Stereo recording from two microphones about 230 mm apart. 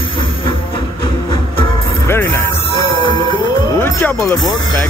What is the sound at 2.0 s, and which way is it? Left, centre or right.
Music, centre.